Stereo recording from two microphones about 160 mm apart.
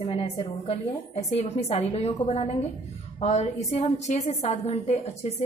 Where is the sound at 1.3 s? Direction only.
40° left (ahead or behind).